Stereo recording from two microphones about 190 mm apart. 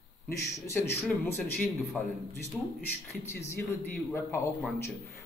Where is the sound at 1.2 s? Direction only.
10° left (ahead or behind).